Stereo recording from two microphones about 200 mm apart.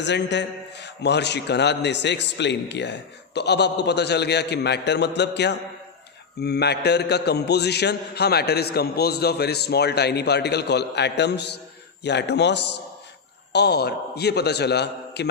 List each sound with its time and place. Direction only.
0.0 s a man's voice: 60° left (ahead or behind)